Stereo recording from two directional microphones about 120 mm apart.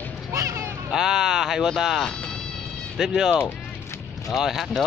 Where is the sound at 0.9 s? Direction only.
5° right (ahead or behind).